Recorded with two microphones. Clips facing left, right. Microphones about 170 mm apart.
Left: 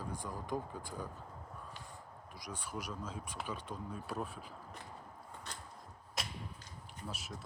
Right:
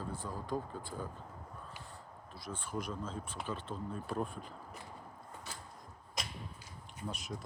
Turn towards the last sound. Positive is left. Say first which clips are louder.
# right 3 dB
turn(degrees=5)  # may be behind; listen again after turning